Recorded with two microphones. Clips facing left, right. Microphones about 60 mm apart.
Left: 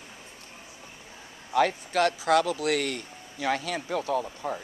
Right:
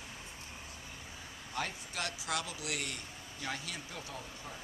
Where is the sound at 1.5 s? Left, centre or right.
Left.